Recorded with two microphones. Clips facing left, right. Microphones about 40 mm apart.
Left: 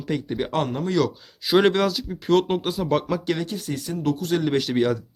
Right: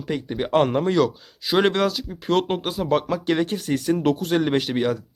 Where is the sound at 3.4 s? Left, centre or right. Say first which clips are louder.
Right 6 dB; right.